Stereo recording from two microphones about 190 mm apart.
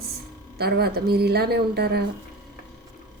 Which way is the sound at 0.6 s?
55° right (ahead or behind).